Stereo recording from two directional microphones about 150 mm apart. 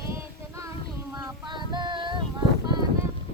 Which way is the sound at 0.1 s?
20° right (ahead or behind).